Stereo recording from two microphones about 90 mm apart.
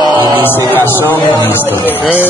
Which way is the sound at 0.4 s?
20° left (ahead or behind).